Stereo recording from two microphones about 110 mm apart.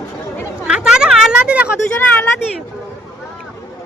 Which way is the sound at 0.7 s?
5° right (ahead or behind).